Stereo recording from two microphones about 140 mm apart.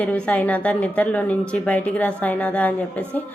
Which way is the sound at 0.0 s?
10° left (ahead or behind).